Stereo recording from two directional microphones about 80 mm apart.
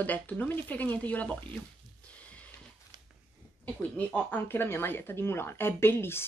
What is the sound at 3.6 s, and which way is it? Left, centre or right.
Speech, centre.